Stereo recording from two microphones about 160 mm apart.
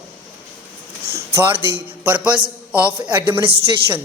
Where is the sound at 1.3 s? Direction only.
15° right (ahead or behind).